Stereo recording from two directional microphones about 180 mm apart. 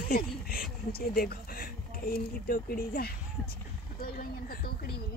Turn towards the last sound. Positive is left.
turn(degrees=55)  # may be behind; listen again after turning